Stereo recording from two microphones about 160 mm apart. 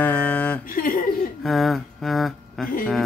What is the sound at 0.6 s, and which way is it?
Chuckle, 60° left (ahead or behind).